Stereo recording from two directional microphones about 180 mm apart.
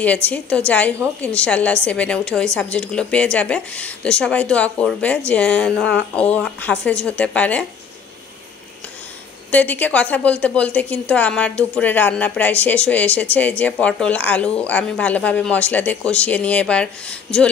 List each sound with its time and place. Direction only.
0.0 s a woman's voice: 10° left (ahead or behind)
9.5 s a woman's voice: 10° left (ahead or behind)